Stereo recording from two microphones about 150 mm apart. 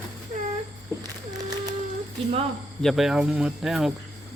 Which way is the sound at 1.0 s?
25° right (ahead or behind).